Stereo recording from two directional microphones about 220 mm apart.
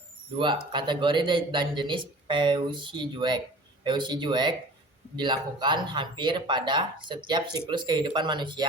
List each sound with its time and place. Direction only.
0.3 s speech: 20° right (ahead or behind)